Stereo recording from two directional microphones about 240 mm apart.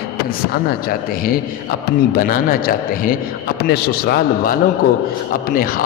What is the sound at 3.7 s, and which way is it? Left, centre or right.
A man's voice, left.